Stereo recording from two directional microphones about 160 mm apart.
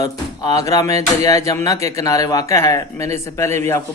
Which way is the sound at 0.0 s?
20° left (ahead or behind).